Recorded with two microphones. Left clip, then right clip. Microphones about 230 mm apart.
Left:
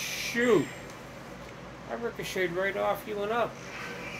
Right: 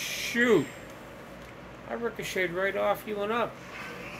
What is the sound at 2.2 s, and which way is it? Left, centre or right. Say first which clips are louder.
Speech: even; right.